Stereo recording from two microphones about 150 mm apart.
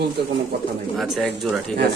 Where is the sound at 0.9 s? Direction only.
Centre (ahead or behind).